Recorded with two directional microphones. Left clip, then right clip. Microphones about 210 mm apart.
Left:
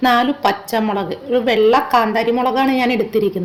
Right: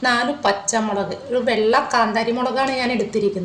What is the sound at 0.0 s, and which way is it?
A woman's voice, 45° left (ahead or behind).